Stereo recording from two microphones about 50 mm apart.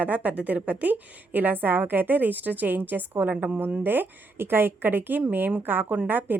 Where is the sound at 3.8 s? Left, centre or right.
Right.